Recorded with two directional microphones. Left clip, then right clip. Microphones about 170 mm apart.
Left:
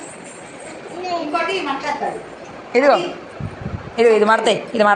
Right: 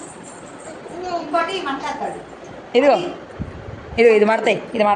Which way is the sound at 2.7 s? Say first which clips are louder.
Left 1 dB; 15° right (ahead or behind).